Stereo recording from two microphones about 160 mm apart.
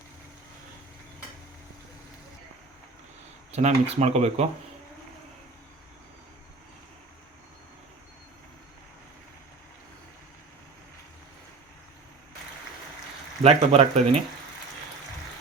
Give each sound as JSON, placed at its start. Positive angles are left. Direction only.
{"t": 3.5, "sound": "speech", "side_deg": -40}
{"t": 13.4, "sound": "speech", "side_deg": -40}